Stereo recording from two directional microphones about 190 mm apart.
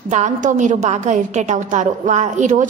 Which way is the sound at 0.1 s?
40° right (ahead or behind).